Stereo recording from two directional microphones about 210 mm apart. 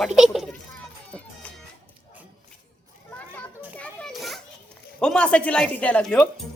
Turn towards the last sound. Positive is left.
turn(degrees=5)  # may be behind; listen again after turning